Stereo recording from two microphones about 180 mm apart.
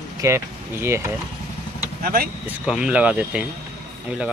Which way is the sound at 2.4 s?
5° right (ahead or behind).